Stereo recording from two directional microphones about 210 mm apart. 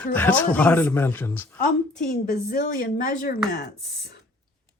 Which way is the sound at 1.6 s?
40° left (ahead or behind).